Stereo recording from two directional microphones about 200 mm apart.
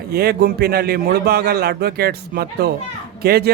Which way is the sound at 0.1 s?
50° right (ahead or behind).